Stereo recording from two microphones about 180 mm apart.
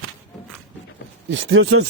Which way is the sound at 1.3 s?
90° right.